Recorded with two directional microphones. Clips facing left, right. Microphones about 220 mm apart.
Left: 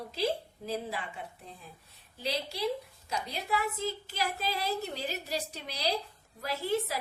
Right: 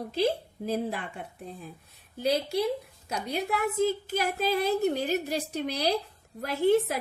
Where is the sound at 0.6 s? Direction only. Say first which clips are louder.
Right 6 dB; 50° right (ahead or behind).